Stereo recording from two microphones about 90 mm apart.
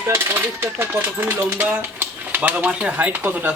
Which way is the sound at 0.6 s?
25° right (ahead or behind).